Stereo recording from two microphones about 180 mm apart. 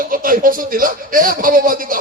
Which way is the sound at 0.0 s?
50° right (ahead or behind).